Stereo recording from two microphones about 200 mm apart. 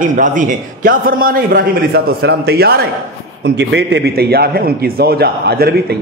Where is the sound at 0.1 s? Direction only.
40° right (ahead or behind).